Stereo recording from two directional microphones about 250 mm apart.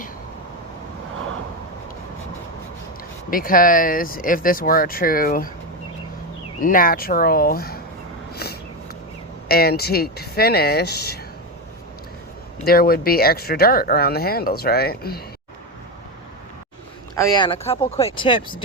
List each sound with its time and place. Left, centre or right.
3.2 s speech: left
6.6 s speech: left
9.5 s speech: left
12.6 s speech: left
17.2 s speech: centre